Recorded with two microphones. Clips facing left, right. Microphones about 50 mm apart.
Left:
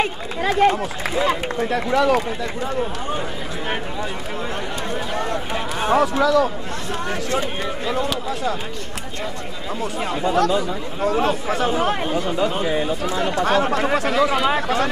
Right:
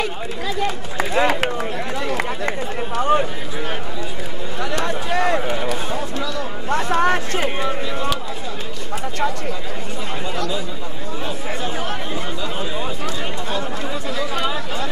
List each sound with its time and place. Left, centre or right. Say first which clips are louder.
0.6 s speech: left 9 dB; left
0.9 s speech: right 2 dB; right
1.7 s speech: left 7 dB; left
4.7 s a sound: right 6 dB; right
5.9 s speech: left 8 dB; left
6.7 s speech: right 8 dB; right
10.3 s speech: left 8 dB; left
11.6 s speech: left 8 dB; left
12.4 s speech: left 5 dB; left
13.4 s speech: left 7 dB; left